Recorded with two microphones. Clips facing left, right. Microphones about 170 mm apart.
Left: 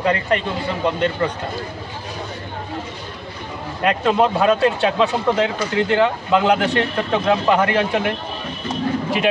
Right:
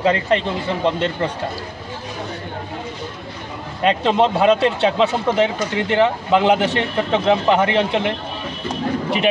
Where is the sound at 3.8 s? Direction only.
25° right (ahead or behind).